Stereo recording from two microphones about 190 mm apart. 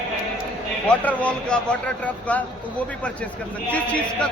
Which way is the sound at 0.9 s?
5° left (ahead or behind).